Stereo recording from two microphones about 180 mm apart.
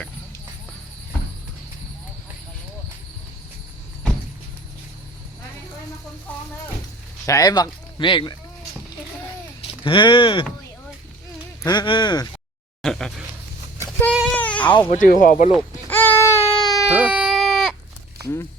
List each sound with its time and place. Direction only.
7.3 s speech: 20° left (ahead or behind)
9.8 s speech: 30° left (ahead or behind)
11.6 s speech: 25° left (ahead or behind)
12.8 s a sound: 5° left (ahead or behind)
14.3 s baby cry: 10° left (ahead or behind)
14.7 s speech: 25° left (ahead or behind)
14.9 s speech: 45° left (ahead or behind)
15.9 s baby cry: 10° left (ahead or behind)
16.9 s baby cry: 10° right (ahead or behind)
17.2 s sheep: centre (ahead or behind)